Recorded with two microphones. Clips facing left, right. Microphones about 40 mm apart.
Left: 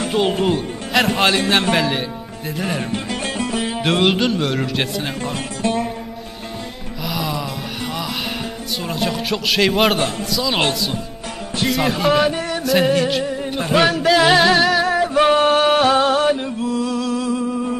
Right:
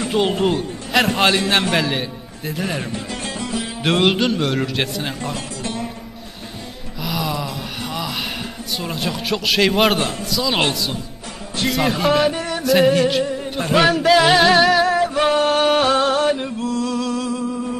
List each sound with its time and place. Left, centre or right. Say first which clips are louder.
0.4 s a man's voice: even; centre
2.9 s music: left 3 dB; left
3.8 s a man's voice: right 1 dB; centre
5.3 s music: left 5 dB; left
7.0 s music: even; centre
10.3 s a man's voice: right 1 dB; centre
11.5 s music: even; centre
15.2 s music: left 3 dB; centre